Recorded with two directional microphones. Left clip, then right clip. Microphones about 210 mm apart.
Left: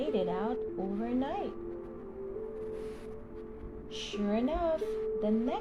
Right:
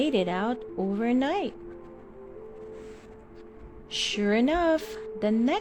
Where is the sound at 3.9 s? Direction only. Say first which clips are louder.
Right 8 dB; 30° right (ahead or behind).